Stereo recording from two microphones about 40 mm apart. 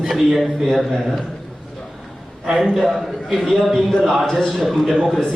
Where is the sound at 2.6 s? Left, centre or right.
Centre.